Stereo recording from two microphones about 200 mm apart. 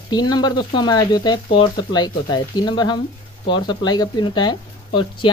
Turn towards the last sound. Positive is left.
turn(degrees=20)  # may be behind; listen again after turning